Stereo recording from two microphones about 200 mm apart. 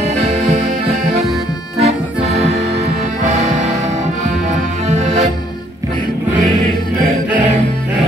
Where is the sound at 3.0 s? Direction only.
35° right (ahead or behind).